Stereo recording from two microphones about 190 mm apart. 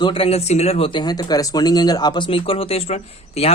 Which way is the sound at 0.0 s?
30° left (ahead or behind).